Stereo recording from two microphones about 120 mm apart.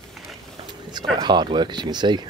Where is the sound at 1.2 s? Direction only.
40° right (ahead or behind).